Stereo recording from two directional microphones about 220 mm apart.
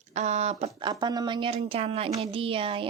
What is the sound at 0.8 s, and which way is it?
A woman's voice, 20° right (ahead or behind).